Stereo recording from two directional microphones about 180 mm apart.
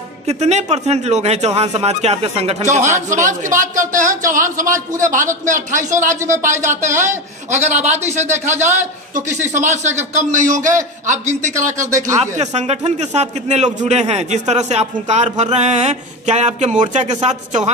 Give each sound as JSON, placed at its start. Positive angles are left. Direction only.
{"t": 0.3, "sound": "a man's voice", "side_deg": -40}